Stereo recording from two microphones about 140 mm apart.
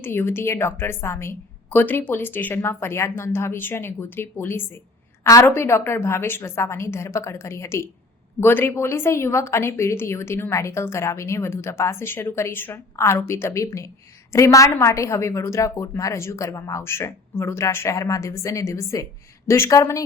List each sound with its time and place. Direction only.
0.0 s a woman's voice: 15° left (ahead or behind)